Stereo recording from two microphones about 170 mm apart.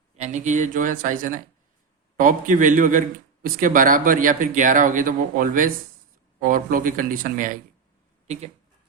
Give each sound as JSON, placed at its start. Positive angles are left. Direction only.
{"t": 0.2, "sound": "speech", "side_deg": -45}